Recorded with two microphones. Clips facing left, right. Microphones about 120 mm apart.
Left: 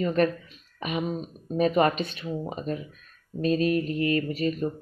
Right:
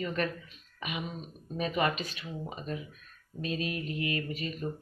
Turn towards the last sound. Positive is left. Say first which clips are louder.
# left 9 dB
turn(degrees=35)  # may be behind; listen again after turning